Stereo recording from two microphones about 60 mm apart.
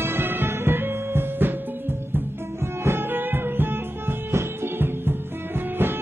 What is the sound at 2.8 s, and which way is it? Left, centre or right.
Music, right.